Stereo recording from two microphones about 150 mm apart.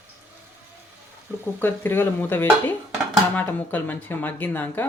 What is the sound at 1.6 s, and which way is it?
Speech, 15° left (ahead or behind).